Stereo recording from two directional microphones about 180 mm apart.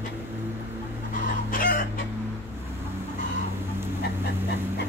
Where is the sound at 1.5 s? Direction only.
50° left (ahead or behind).